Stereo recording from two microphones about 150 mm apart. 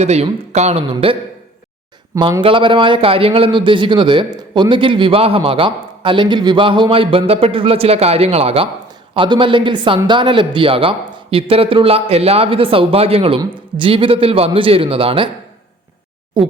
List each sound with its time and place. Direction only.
0.0 s speech: 45° right (ahead or behind)
2.4 s a man's voice: 35° right (ahead or behind)